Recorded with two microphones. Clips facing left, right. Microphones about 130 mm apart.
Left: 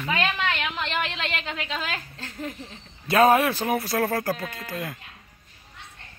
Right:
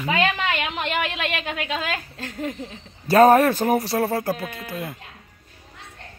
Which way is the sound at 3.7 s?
30° right (ahead or behind).